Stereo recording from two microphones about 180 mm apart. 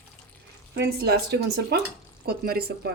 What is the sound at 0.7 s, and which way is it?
A woman's voice, 65° right (ahead or behind).